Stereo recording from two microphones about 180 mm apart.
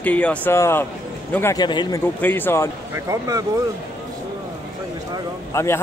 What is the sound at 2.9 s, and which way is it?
Speech, 15° right (ahead or behind).